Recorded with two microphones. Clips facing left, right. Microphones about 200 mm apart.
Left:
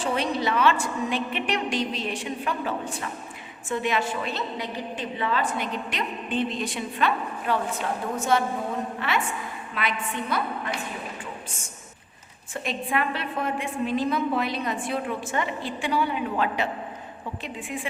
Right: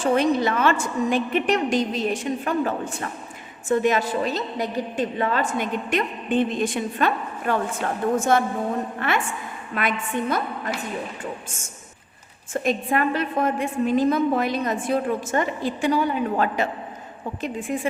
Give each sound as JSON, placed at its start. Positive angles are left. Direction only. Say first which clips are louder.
{"t": 0.0, "sound": "a woman's voice", "louder": "right 6 dB", "side_deg": -50}
{"t": 12.6, "sound": "a woman's voice", "louder": "right 5 dB", "side_deg": -45}